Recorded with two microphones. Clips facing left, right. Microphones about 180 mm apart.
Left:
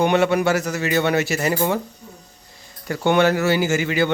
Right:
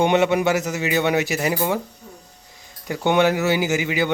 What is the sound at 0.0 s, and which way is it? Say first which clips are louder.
Speech: even; 20° right (ahead or behind).